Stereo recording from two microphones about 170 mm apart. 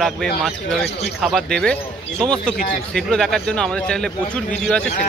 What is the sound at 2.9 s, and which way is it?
Speech, 5° left (ahead or behind).